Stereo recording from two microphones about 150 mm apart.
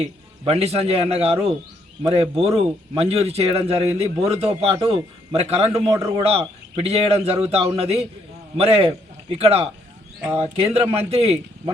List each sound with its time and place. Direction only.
0.0 s a man's voice: 40° right (ahead or behind)